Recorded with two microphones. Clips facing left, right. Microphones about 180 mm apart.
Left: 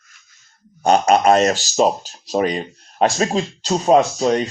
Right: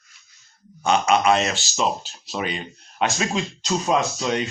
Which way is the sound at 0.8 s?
40° left (ahead or behind).